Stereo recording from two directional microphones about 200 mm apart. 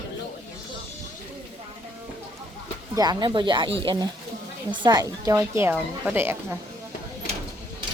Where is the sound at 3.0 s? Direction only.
20° right (ahead or behind).